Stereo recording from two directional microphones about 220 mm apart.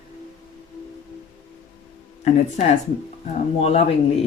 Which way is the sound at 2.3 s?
30° left (ahead or behind).